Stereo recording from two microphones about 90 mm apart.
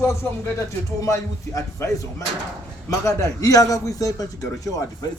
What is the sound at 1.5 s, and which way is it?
A man's voice, 35° left (ahead or behind).